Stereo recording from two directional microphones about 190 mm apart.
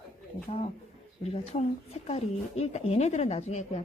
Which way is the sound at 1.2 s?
35° left (ahead or behind).